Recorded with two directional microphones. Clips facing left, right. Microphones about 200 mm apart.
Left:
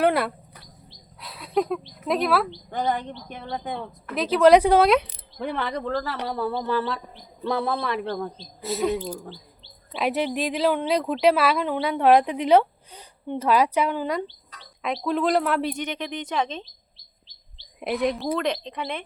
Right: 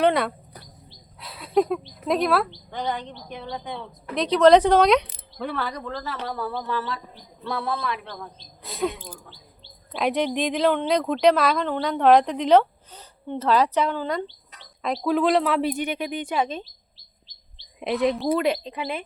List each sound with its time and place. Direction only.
0.0 s bird: 5° left (ahead or behind)
1.2 s speech: centre (ahead or behind)
2.6 s a woman's voice: 50° left (ahead or behind)
4.1 s a woman's voice: 5° left (ahead or behind); by 8.1 s 30° left (ahead or behind)
8.6 s a woman's voice: 5° left (ahead or behind)
14.8 s speech: centre (ahead or behind)
17.7 s speech: centre (ahead or behind)